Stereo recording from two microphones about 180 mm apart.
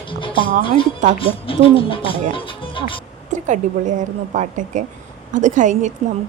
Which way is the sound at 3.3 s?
45° right (ahead or behind).